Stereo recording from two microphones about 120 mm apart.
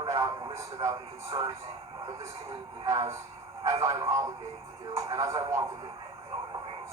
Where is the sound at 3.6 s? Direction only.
25° right (ahead or behind).